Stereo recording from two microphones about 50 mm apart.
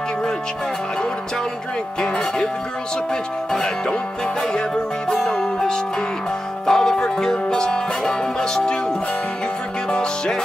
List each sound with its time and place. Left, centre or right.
2.0 s speech: centre
3.5 s speech: centre
5.1 s music: centre
9.8 s music: centre